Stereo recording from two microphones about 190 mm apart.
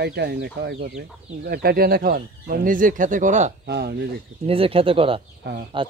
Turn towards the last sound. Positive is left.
turn(degrees=-25)  # may be behind; listen again after turning